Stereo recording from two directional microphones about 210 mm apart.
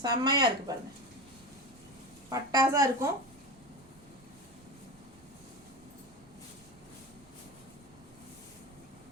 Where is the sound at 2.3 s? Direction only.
15° right (ahead or behind).